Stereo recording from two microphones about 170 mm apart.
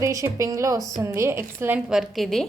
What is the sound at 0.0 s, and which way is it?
A woman's voice, 20° right (ahead or behind).